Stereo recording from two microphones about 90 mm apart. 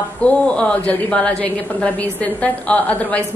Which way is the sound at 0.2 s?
15° left (ahead or behind).